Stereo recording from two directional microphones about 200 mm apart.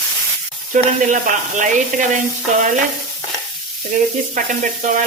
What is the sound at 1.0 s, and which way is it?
Speech, 40° right (ahead or behind).